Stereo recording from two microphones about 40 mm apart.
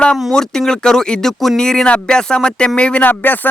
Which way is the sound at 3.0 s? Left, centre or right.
Left.